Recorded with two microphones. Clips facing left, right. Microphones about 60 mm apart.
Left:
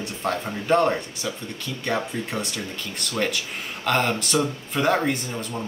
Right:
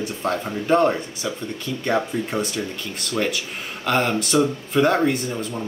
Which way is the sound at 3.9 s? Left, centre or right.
Centre.